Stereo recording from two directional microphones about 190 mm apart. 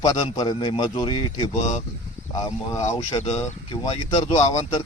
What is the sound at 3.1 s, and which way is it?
A man's voice, 35° left (ahead or behind).